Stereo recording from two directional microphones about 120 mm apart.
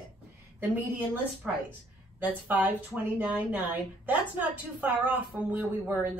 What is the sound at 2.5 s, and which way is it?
Speech, 15° right (ahead or behind).